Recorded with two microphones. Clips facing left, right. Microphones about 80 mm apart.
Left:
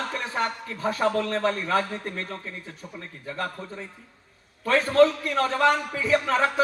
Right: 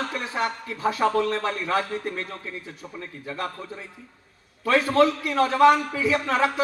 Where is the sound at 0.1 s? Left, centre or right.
Left.